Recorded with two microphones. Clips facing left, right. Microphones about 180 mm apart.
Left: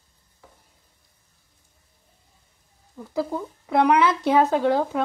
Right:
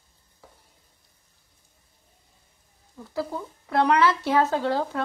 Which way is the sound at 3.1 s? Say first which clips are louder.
Left 4 dB; 15° left (ahead or behind).